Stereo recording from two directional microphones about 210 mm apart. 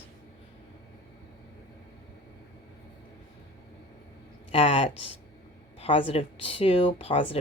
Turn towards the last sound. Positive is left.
turn(degrees=25)  # may be behind; listen again after turning